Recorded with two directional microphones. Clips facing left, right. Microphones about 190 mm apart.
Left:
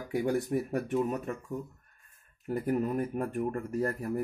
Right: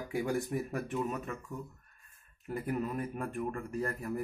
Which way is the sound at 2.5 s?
45° left (ahead or behind).